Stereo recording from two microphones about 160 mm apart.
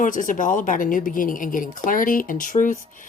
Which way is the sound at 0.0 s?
55° left (ahead or behind).